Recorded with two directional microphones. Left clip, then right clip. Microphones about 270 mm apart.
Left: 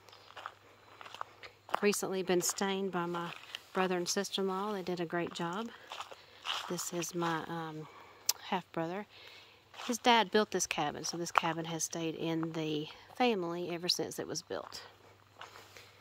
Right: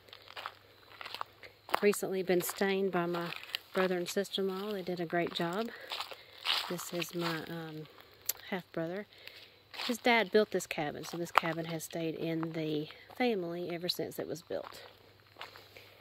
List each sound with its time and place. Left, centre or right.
0.3 s biting: right
1.8 s speech: centre
5.9 s biting: right
6.7 s speech: centre
9.7 s a sound: right
10.0 s speech: centre